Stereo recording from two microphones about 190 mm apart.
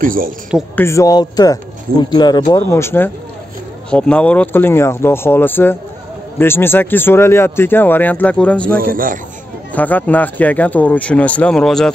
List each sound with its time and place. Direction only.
0.0 s speech: 45° right (ahead or behind)
0.7 s speech: 15° left (ahead or behind)
8.7 s speech: 50° right (ahead or behind)
9.7 s speech: 10° left (ahead or behind)